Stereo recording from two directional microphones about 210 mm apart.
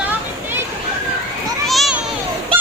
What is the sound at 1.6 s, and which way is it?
Children playing, centre (ahead or behind).